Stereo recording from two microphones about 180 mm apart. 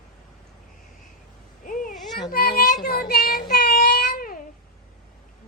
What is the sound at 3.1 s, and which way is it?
Child singing, 60° left (ahead or behind).